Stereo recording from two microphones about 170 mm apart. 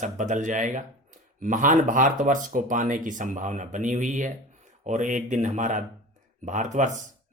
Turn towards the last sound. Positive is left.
turn(degrees=-45)  # may be behind; listen again after turning